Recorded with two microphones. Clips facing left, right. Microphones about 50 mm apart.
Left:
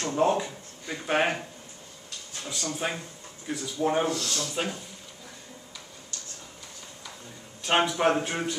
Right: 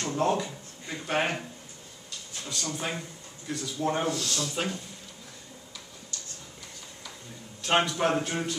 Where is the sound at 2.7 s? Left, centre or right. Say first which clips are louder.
Left 3 dB; centre.